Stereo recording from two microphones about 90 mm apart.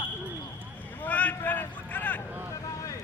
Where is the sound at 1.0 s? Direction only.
15° left (ahead or behind).